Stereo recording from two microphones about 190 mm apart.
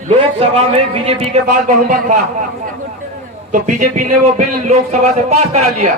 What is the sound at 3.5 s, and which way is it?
Speech, 40° right (ahead or behind).